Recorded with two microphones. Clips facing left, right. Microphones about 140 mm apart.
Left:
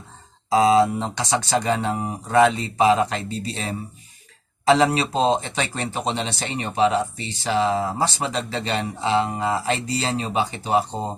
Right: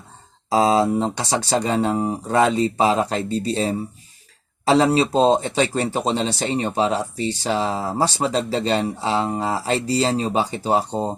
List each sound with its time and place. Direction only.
0.5 s speech: 35° right (ahead or behind)